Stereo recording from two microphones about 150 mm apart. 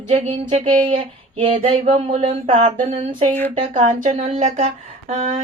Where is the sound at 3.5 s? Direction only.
50° right (ahead or behind).